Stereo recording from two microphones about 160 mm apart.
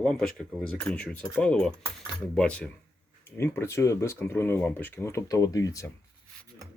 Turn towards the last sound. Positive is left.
turn(degrees=20)  # may be behind; listen again after turning